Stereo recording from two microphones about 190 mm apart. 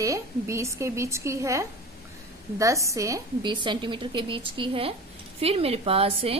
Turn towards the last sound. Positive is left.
turn(degrees=-30)  # may be behind; listen again after turning